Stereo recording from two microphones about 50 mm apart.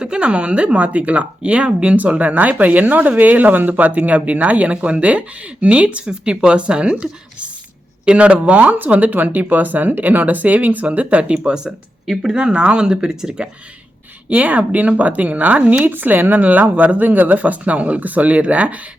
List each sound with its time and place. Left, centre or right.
0.0 s speech: right
14.3 s speech: right